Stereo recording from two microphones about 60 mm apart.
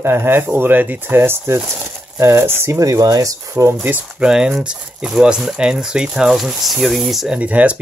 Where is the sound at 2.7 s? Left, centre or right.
Right.